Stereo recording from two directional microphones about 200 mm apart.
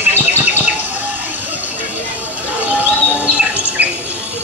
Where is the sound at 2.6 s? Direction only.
5° right (ahead or behind).